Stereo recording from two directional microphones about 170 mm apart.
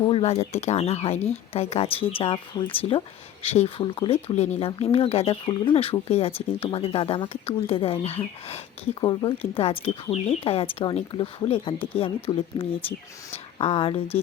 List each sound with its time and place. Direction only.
0.0 s speech: 35° left (ahead or behind)